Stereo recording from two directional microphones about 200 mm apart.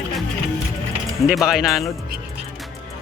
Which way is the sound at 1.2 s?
Centre (ahead or behind).